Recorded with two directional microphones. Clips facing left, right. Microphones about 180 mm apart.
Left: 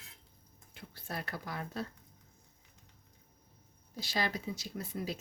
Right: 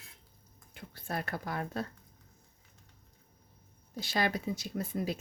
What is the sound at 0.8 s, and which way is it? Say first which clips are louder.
Speech: right 4 dB; 50° right (ahead or behind).